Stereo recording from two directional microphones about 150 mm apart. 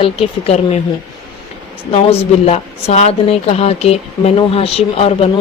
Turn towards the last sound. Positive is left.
turn(degrees=40)  # may be behind; listen again after turning